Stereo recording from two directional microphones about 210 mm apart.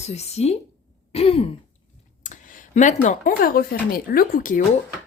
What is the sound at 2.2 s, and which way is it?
Speech, 40° left (ahead or behind).